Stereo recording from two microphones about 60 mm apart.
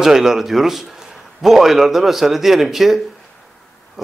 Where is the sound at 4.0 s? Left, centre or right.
Centre.